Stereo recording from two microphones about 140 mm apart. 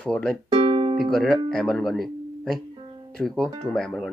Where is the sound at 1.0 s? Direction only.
5° left (ahead or behind).